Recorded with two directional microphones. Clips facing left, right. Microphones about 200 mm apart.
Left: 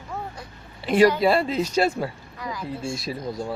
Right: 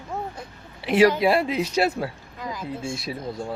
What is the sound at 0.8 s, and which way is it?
Speech, 10° right (ahead or behind).